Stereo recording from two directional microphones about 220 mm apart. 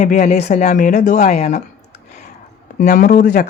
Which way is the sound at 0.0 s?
35° left (ahead or behind).